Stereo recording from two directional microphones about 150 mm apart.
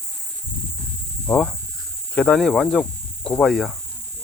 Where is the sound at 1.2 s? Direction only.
5° left (ahead or behind).